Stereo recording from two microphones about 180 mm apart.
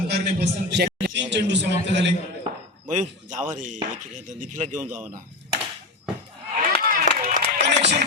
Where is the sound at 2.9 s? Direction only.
45° right (ahead or behind).